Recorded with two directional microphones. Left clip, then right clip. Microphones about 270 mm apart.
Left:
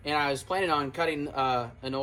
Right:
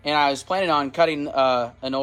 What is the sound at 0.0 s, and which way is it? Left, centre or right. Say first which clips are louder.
Speech: right 8 dB; right.